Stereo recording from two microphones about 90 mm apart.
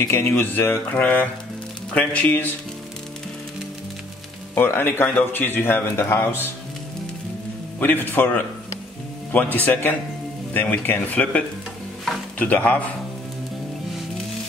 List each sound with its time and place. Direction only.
0.0 s a man's voice: 30° left (ahead or behind)
4.6 s a man's voice: 25° left (ahead or behind)
7.8 s a man's voice: 20° left (ahead or behind)